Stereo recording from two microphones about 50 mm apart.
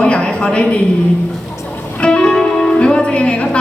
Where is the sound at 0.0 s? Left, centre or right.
Left.